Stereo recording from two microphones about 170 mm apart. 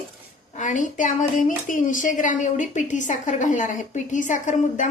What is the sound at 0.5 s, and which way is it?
Speech, 50° left (ahead or behind).